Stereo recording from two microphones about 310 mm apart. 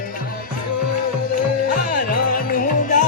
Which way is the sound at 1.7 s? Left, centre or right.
Left.